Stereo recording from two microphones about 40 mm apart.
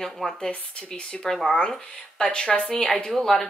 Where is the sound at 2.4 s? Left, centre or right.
Left.